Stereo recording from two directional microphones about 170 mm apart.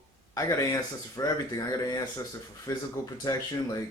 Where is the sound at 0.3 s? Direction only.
20° left (ahead or behind).